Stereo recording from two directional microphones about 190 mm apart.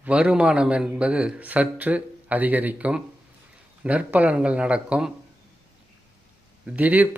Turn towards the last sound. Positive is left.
turn(degrees=-10)  # may be behind; listen again after turning